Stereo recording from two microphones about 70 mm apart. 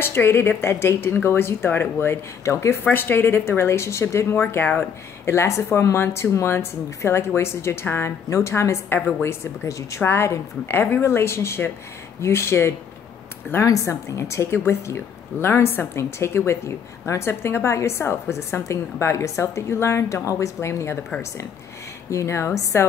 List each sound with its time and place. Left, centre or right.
0.0 s a woman's voice: left
2.8 s a woman's voice: left
22.1 s a woman's voice: left